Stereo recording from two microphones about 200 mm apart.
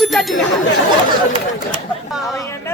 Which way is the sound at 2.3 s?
15° left (ahead or behind).